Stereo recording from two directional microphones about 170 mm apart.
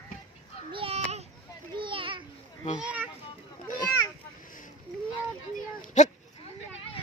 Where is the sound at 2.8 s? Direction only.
10° right (ahead or behind).